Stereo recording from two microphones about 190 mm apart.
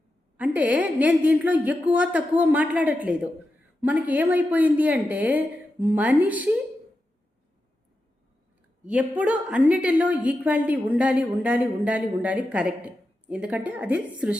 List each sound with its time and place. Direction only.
0.3 s a woman's voice: 10° right (ahead or behind)
8.8 s a woman's voice: 5° right (ahead or behind)